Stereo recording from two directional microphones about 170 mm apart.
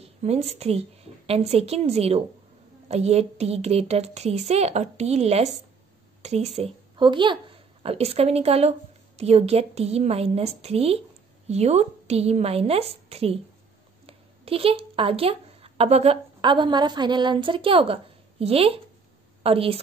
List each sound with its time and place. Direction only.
0.0 s a woman's voice: 40° right (ahead or behind)